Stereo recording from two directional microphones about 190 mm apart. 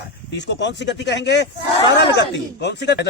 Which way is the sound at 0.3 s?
65° left (ahead or behind).